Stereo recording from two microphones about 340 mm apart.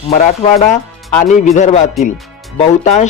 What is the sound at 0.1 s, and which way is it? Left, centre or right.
Speech, left.